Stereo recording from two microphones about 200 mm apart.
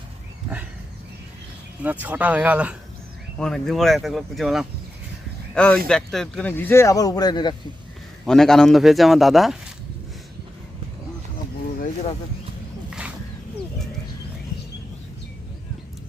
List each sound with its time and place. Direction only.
1.8 s a man's voice: 10° right (ahead or behind); by 7.5 s 20° left (ahead or behind)
8.2 s a man's voice: centre (ahead or behind)